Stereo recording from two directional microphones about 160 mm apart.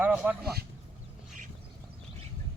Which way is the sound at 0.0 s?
10° right (ahead or behind).